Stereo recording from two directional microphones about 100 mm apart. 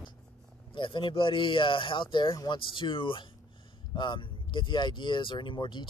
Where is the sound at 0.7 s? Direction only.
55° left (ahead or behind).